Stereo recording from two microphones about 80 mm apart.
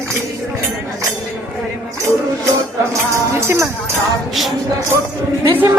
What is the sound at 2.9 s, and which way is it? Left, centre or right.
Music, right.